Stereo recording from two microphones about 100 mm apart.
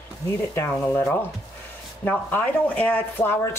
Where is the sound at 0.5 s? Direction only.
20° left (ahead or behind).